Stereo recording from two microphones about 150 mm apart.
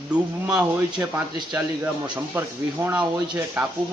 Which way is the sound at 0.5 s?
10° right (ahead or behind).